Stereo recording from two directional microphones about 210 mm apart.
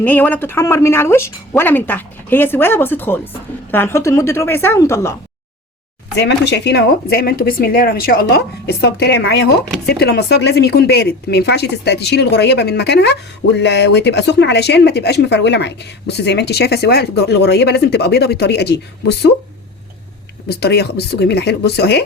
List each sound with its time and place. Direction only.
0.0 s speech: 10° left (ahead or behind)
6.1 s speech: 55° left (ahead or behind)
20.5 s speech: 50° left (ahead or behind)